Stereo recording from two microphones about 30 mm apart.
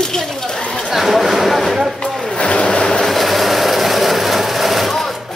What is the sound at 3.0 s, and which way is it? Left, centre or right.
Vehicle, centre.